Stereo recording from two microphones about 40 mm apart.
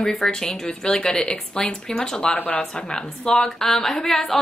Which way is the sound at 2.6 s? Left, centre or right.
Centre.